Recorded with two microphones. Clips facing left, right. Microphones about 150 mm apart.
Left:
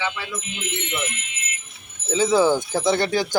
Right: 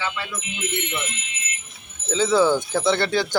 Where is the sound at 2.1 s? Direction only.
15° left (ahead or behind).